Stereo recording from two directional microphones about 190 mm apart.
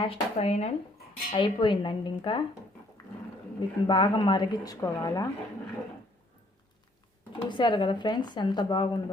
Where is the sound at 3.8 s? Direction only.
25° left (ahead or behind).